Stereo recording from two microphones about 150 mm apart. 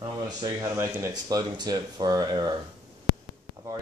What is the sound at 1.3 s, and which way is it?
Speech, 30° right (ahead or behind).